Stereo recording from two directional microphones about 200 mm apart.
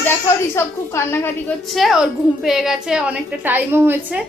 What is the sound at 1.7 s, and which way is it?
A woman's voice, centre (ahead or behind).